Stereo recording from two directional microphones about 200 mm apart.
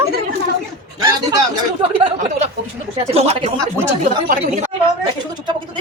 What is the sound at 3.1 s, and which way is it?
Speech, 30° right (ahead or behind).